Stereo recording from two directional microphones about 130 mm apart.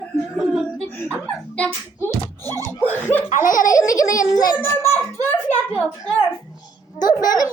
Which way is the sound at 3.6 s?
25° left (ahead or behind).